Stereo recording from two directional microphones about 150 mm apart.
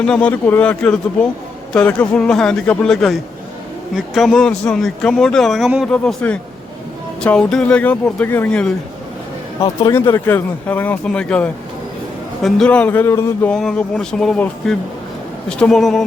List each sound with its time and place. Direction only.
0.0 s speech: 5° left (ahead or behind)
9.6 s speech: 30° left (ahead or behind)
9.9 s speech: 15° left (ahead or behind)